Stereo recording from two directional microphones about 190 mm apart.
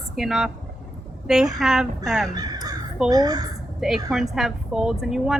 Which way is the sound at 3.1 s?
20° right (ahead or behind).